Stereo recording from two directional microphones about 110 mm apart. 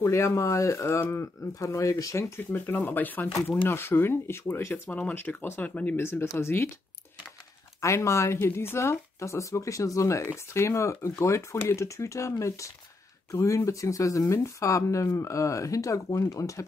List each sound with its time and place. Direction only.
0.0 s speech: 25° left (ahead or behind)
7.8 s speech: 25° left (ahead or behind)